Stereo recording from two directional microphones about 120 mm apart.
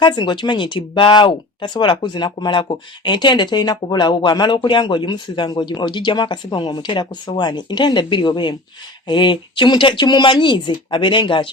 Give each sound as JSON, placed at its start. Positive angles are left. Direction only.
{"t": 0.0, "sound": "speech", "side_deg": 40}